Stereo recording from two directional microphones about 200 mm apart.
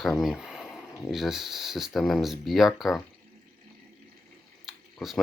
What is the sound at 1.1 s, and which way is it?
Speech, centre (ahead or behind).